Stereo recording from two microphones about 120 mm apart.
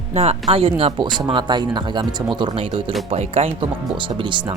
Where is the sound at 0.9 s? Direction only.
40° right (ahead or behind); by 3.5 s 55° right (ahead or behind).